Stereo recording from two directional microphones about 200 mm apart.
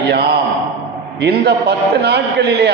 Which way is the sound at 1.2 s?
55° right (ahead or behind).